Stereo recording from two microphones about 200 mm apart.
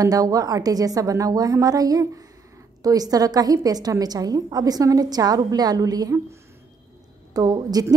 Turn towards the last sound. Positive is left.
turn(degrees=-20)  # may be behind; listen again after turning